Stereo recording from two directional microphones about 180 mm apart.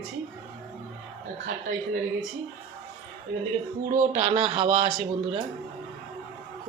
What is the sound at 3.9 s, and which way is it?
Speech, 40° right (ahead or behind).